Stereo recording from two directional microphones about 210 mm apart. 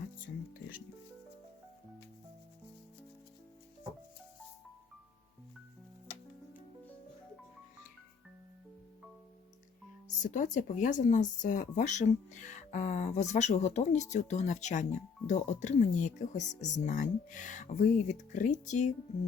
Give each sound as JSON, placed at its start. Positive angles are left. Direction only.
{"t": 10.2, "sound": "speech", "side_deg": 35}